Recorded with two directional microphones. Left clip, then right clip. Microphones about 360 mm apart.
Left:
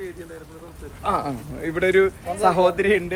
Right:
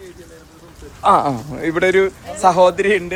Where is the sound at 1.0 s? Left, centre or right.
Centre.